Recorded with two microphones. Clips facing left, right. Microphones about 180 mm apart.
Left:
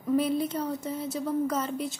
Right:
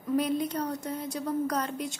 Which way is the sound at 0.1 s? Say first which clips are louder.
Left 2 dB; 5° left (ahead or behind).